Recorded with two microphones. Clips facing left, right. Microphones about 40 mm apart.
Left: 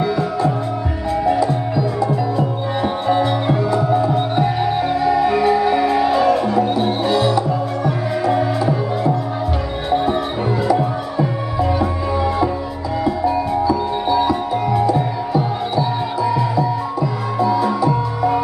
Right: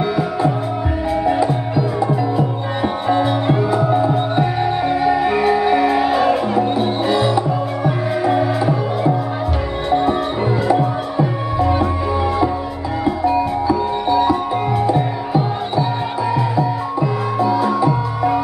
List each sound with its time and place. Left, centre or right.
0.0 s music: centre
9.8 s music: centre
13.0 s music: centre
14.0 s music: centre